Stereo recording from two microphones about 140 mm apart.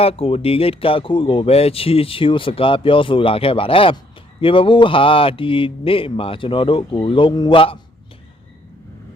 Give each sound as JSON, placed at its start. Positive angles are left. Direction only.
{"t": 0.0, "sound": "speech", "side_deg": 45}